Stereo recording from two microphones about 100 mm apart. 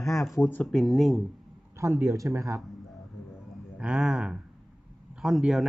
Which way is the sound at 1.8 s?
30° right (ahead or behind).